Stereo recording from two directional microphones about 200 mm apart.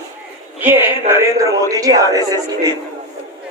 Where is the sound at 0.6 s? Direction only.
10° right (ahead or behind).